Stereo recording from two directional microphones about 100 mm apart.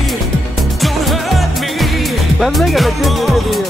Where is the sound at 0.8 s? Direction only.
Centre (ahead or behind).